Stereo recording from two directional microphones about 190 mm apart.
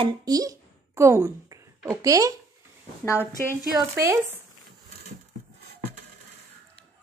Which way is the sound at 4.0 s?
15° right (ahead or behind).